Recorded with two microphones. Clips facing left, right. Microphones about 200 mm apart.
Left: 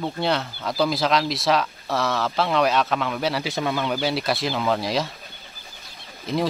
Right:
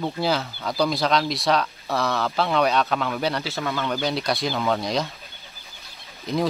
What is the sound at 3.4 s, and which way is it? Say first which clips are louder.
Speech: left 2 dB; 15° left (ahead or behind).